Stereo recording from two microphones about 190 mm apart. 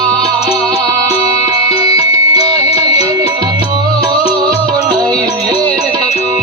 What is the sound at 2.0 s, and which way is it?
Music, 30° left (ahead or behind).